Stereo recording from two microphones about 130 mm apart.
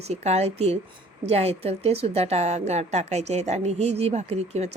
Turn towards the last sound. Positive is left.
turn(degrees=-55)  # may be behind; listen again after turning